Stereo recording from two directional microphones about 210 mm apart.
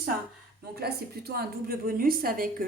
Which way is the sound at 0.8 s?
50° right (ahead or behind).